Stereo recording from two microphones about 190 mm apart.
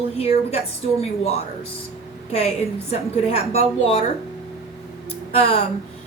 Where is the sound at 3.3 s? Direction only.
30° left (ahead or behind).